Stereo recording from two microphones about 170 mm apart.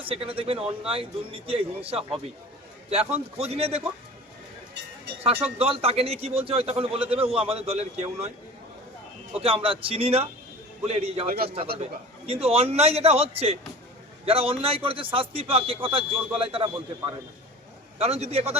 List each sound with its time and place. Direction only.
0.0 s speech: 35° right (ahead or behind)
5.2 s speech: 35° right (ahead or behind)
9.4 s speech: 35° right (ahead or behind)
11.3 s a man's voice: 60° right (ahead or behind)
11.8 s speech: 35° right (ahead or behind)
17.9 s speech: 35° right (ahead or behind)